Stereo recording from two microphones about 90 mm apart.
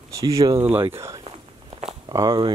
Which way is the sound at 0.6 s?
25° right (ahead or behind).